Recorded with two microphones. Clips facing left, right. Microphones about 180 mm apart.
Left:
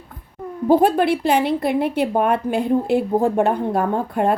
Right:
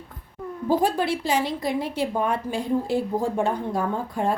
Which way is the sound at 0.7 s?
60° left (ahead or behind).